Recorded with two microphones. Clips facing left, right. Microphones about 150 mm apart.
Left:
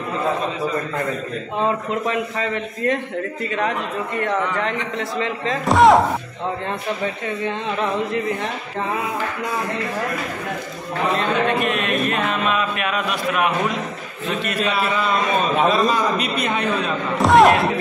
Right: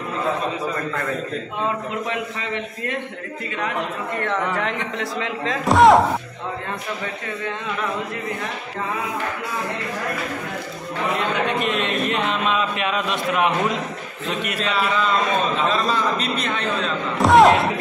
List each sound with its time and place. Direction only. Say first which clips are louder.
1.6 s a man's voice: left 5 dB; 35° left (ahead or behind)
4.6 s speech: left 1 dB; centre (ahead or behind)
11.1 s speech: left 2 dB; 20° right (ahead or behind)
14.6 s a man's voice: even; 10° left (ahead or behind)
17.2 s speech: even; centre (ahead or behind)